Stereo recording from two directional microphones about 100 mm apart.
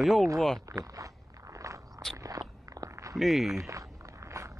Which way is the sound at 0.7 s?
35° right (ahead or behind).